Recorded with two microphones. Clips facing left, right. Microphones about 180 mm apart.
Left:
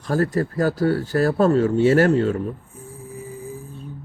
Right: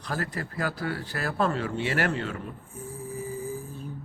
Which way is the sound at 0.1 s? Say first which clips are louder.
Left 12 dB; 40° left (ahead or behind).